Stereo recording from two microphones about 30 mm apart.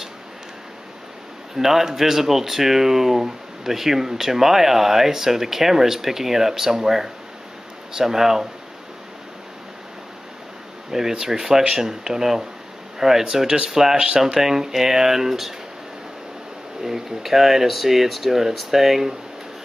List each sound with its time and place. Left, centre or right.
1.6 s speech: centre
10.9 s speech: centre
13.9 s speech: right
14.2 s speech: centre
16.8 s speech: centre